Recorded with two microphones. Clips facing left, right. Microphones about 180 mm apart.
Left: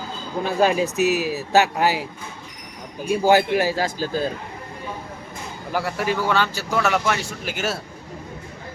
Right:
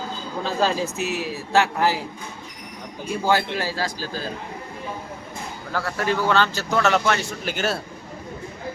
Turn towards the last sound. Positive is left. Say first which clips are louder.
# right 1 dB
turn(degrees=5)  # may be behind; listen again after turning